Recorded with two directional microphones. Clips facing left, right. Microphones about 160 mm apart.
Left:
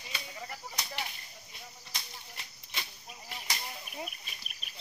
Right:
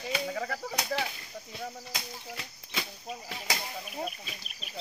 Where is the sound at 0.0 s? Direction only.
90° right.